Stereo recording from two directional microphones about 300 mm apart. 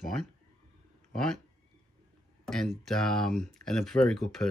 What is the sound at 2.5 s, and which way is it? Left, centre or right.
Speech, centre.